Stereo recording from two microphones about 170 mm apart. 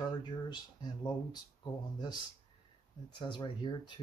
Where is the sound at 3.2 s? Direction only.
25° left (ahead or behind).